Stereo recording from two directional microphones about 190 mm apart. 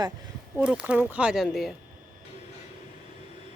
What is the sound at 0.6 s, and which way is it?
Speech, 5° right (ahead or behind).